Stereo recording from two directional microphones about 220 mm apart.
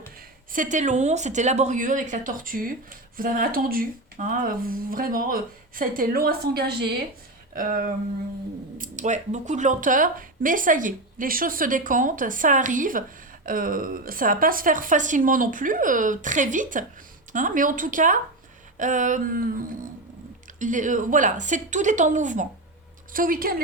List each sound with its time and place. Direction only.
0.5 s speech: 35° right (ahead or behind)